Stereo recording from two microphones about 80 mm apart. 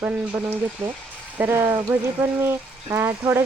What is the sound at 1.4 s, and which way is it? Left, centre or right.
Speech, right.